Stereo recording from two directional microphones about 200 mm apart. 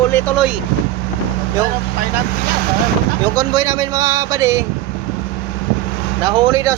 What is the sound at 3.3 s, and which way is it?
Speech, 20° right (ahead or behind).